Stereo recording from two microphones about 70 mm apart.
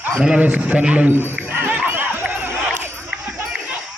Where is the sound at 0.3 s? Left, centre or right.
Right.